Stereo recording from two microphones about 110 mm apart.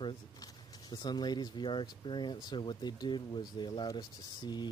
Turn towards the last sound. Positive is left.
turn(degrees=40)  # may be behind; listen again after turning